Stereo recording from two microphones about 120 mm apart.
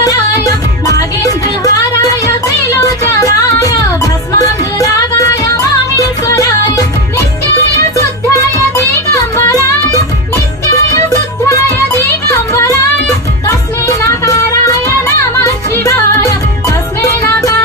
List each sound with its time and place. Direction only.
0.0 s music: 30° left (ahead or behind)
9.3 s music: 25° left (ahead or behind)
14.8 s music: 25° left (ahead or behind)